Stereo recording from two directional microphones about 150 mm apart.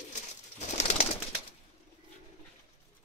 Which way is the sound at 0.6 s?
50° left (ahead or behind).